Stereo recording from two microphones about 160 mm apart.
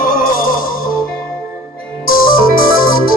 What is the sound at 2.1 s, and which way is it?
Music, 65° left (ahead or behind).